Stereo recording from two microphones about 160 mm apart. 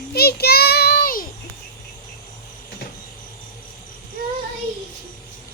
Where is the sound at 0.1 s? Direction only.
80° left; by 1.3 s 65° left (ahead or behind).